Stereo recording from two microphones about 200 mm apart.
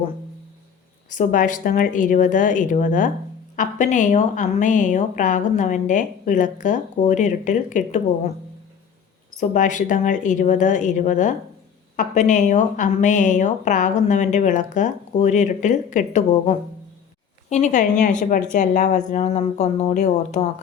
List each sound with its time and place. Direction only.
1.1 s a woman's voice: 40° left (ahead or behind)
9.4 s a woman's voice: 40° left (ahead or behind)
17.5 s a woman's voice: 35° left (ahead or behind)